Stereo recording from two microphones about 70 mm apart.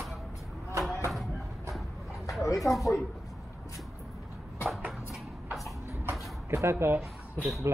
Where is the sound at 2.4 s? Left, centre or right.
Left.